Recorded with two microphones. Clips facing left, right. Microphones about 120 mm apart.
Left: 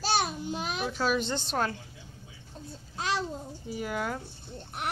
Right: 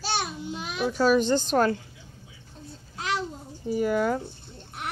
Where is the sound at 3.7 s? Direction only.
45° right (ahead or behind).